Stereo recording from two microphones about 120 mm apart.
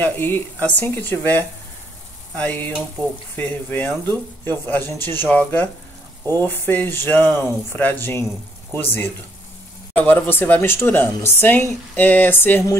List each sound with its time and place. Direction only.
0.0 s speech: 15° left (ahead or behind)